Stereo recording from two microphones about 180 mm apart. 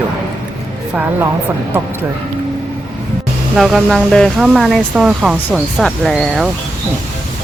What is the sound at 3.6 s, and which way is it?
Speech, centre (ahead or behind).